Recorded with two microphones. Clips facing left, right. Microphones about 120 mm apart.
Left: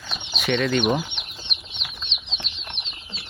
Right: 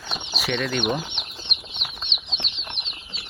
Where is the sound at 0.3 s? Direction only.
5° right (ahead or behind).